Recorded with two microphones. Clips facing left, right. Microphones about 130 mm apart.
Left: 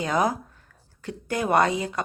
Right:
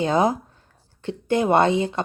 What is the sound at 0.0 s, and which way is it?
Speech, 25° right (ahead or behind).